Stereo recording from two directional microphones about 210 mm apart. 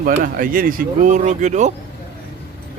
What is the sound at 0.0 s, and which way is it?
Speech, 40° right (ahead or behind).